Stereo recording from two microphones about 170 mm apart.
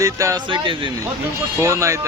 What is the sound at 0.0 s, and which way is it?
Speech, 20° right (ahead or behind).